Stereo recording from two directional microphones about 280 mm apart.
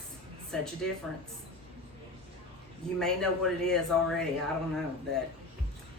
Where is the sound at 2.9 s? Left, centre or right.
Centre.